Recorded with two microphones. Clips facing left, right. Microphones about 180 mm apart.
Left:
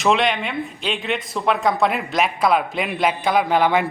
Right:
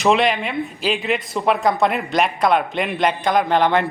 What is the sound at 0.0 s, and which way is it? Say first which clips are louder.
A man's voice: right 2 dB; centre (ahead or behind).